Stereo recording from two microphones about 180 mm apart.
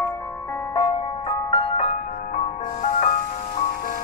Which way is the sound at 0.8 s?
30° left (ahead or behind).